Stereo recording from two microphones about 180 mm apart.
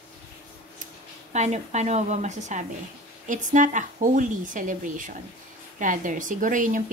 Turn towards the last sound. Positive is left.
turn(degrees=-45)  # may be behind; listen again after turning